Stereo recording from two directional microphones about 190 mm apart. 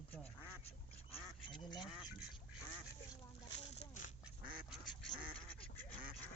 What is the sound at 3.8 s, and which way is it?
Duck, 40° left (ahead or behind).